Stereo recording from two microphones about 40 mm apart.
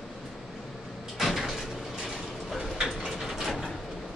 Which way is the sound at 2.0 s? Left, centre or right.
Centre.